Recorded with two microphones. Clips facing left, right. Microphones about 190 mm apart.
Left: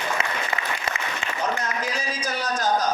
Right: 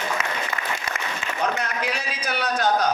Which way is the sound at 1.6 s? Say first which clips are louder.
Right 1 dB; 65° right (ahead or behind).